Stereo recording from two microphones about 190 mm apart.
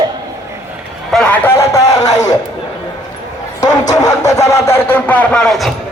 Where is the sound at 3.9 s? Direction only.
15° left (ahead or behind); by 5.7 s centre (ahead or behind).